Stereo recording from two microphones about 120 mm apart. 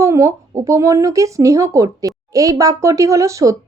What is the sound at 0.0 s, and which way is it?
Speech, 25° right (ahead or behind).